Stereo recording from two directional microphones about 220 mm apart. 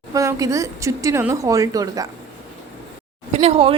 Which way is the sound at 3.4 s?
25° right (ahead or behind).